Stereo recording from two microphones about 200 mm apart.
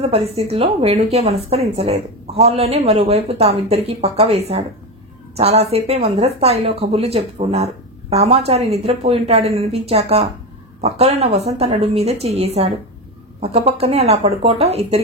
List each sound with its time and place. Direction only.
0.0 s speech: 30° right (ahead or behind)